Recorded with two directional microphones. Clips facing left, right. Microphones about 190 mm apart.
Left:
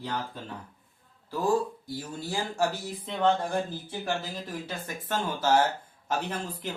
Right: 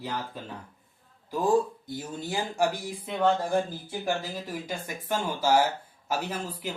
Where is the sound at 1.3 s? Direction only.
20° right (ahead or behind).